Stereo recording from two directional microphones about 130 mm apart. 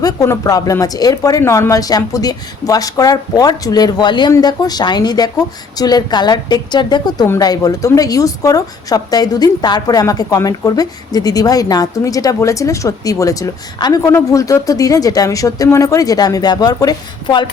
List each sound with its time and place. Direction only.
0.0 s a woman's voice: 25° left (ahead or behind)